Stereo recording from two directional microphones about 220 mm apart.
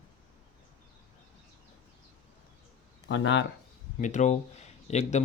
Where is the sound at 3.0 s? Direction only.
55° left (ahead or behind).